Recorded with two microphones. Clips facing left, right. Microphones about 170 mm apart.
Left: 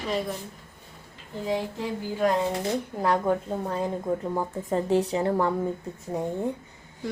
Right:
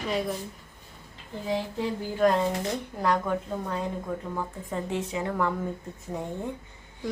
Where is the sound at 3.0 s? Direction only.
30° left (ahead or behind).